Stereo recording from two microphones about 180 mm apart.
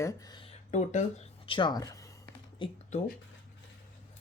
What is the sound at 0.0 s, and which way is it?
Speech, 20° left (ahead or behind).